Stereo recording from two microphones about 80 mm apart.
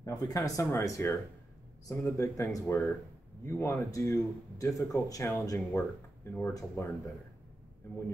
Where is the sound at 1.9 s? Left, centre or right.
Left.